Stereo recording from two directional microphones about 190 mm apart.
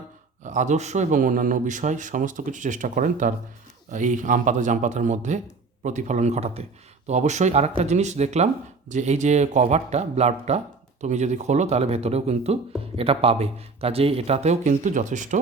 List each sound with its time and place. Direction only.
0.4 s a man's voice: 40° right (ahead or behind)